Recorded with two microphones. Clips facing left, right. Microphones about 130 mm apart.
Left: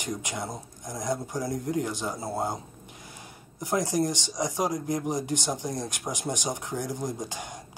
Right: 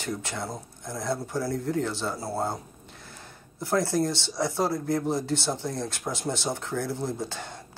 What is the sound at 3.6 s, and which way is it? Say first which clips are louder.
Speech: right 1 dB; 15° left (ahead or behind).